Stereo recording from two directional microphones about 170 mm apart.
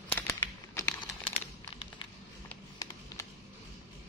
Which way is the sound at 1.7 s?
35° left (ahead or behind).